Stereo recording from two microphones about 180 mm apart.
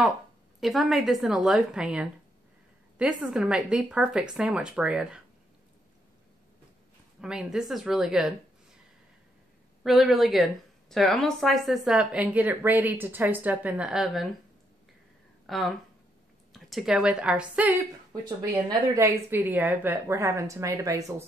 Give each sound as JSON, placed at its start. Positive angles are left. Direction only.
{"t": 0.6, "sound": "speech", "side_deg": 0}
{"t": 7.2, "sound": "speech", "side_deg": -5}
{"t": 9.8, "sound": "speech", "side_deg": 0}
{"t": 15.4, "sound": "a woman's voice", "side_deg": 0}